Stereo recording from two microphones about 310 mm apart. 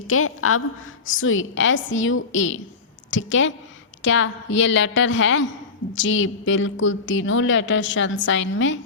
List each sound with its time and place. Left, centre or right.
0.1 s a woman's voice: left